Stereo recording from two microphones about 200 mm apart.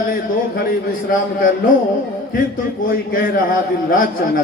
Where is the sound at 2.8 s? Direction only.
45° left (ahead or behind).